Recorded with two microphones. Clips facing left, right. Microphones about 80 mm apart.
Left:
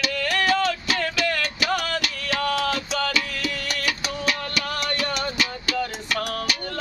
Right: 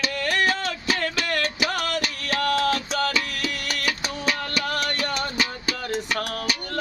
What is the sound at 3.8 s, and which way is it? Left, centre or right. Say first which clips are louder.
Music: even; right.